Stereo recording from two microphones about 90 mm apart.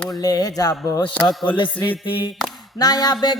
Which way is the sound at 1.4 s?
65° left (ahead or behind).